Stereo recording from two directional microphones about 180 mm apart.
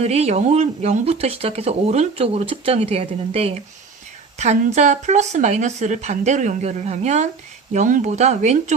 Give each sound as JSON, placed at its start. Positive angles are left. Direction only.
{"t": 0.0, "sound": "speech", "side_deg": -35}